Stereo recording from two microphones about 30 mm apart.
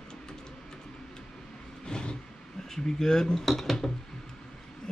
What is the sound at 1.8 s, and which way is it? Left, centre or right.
Vehicle, left.